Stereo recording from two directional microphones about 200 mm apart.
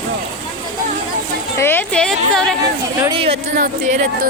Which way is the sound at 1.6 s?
10° left (ahead or behind).